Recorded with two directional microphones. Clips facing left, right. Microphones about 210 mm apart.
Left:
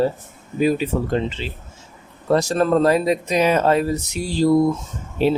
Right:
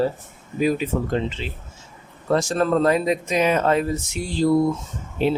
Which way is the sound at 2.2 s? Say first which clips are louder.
Left 2 dB; 35° left (ahead or behind).